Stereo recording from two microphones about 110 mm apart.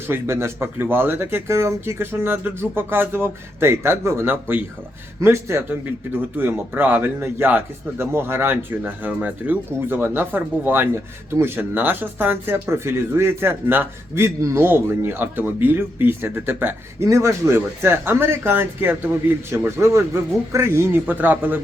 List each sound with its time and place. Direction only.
0.1 s a man's voice: 25° right (ahead or behind)